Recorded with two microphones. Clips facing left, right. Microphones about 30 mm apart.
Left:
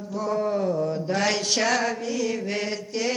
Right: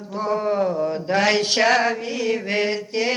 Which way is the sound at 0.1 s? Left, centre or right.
Right.